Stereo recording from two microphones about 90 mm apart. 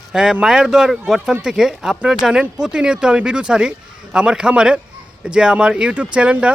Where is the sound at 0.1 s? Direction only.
10° right (ahead or behind).